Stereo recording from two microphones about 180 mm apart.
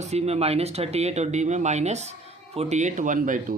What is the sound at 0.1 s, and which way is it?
A man's voice, 35° right (ahead or behind).